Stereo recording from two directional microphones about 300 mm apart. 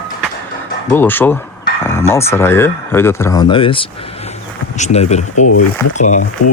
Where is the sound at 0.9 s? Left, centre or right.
Centre.